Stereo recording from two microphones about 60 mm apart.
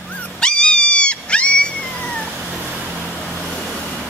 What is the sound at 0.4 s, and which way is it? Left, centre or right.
Cat, centre.